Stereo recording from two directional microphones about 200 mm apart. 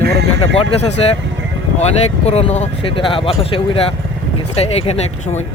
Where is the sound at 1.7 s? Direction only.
35° left (ahead or behind).